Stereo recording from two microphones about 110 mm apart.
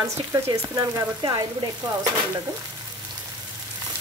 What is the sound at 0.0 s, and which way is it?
Frying, 30° right (ahead or behind).